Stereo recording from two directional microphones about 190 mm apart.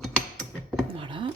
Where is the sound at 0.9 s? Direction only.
25° right (ahead or behind).